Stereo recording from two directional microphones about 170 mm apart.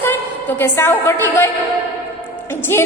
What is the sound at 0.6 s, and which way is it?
Speech, 15° left (ahead or behind).